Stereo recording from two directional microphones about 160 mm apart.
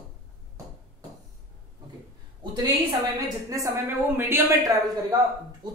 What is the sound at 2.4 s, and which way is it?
A woman's voice, 25° right (ahead or behind).